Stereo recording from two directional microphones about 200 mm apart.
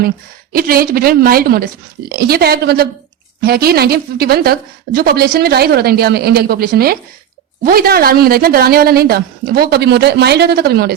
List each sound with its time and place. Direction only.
0.5 s a woman's voice: 50° right (ahead or behind)